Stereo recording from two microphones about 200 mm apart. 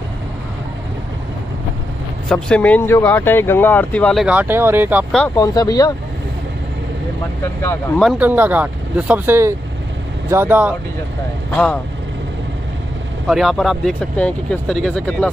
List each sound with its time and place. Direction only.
2.2 s speech: 5° left (ahead or behind)
5.3 s speech: 20° left (ahead or behind)
7.6 s speech: 10° left (ahead or behind)
8.0 s speech: 5° right (ahead or behind)
11.5 s speech: 5° left (ahead or behind)
13.3 s speech: centre (ahead or behind)